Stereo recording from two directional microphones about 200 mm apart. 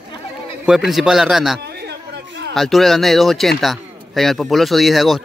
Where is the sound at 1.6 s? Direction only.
55° right (ahead or behind).